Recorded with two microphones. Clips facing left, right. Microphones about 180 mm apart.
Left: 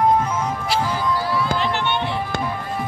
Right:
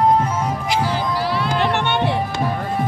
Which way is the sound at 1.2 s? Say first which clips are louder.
Right 2 dB; 85° right.